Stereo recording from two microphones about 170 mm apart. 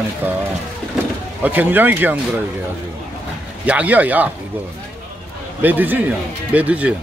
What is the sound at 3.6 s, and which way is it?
Speech, 10° right (ahead or behind).